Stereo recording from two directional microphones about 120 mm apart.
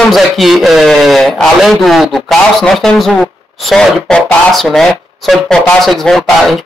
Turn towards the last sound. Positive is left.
turn(degrees=0)  # may be behind; listen again after turning